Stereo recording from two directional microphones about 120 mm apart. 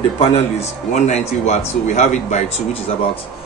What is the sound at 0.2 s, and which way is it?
A man's voice, 65° left (ahead or behind).